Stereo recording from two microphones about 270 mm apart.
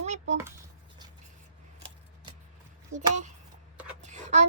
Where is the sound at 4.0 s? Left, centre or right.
Right.